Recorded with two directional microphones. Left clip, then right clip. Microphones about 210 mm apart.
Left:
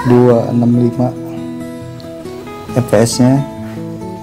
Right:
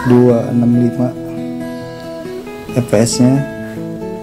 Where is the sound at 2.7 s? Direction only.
5° left (ahead or behind).